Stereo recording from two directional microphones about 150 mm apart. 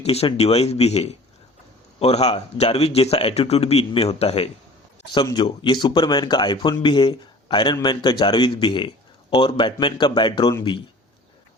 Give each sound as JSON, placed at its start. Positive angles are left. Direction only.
{"t": 0.0, "sound": "a man's voice", "side_deg": 40}
{"t": 5.2, "sound": "a man's voice", "side_deg": 30}